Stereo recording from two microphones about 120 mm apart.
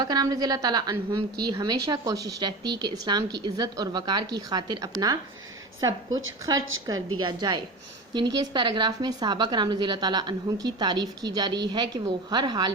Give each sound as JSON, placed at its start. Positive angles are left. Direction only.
{"t": 0.0, "sound": "a woman's voice", "side_deg": -35}